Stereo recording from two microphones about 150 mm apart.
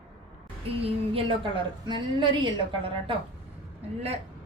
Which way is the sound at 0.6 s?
40° right (ahead or behind).